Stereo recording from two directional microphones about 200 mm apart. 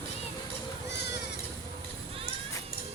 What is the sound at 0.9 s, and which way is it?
Cat, 60° left (ahead or behind).